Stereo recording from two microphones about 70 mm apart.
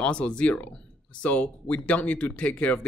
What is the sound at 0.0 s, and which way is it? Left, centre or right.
Speech, centre.